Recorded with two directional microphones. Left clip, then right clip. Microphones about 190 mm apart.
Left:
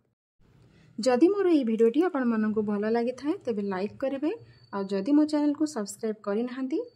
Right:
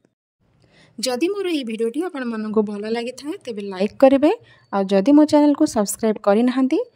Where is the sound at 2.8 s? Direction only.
45° right (ahead or behind).